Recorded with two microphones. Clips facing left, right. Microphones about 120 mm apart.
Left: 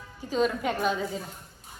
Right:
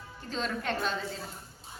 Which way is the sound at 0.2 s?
10° left (ahead or behind).